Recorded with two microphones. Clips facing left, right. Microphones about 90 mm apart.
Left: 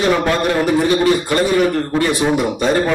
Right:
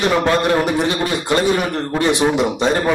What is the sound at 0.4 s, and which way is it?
A man's voice, 20° right (ahead or behind).